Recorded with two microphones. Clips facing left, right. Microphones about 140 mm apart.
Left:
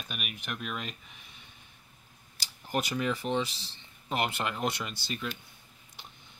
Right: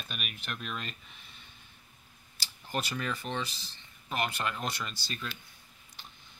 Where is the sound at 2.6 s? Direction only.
15° left (ahead or behind).